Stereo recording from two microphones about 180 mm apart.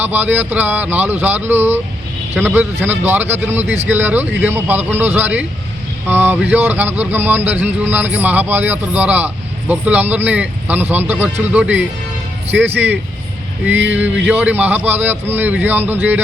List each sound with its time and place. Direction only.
0.0 s speech: 10° right (ahead or behind)